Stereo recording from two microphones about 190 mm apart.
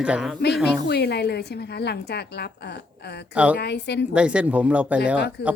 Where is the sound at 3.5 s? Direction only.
60° left (ahead or behind).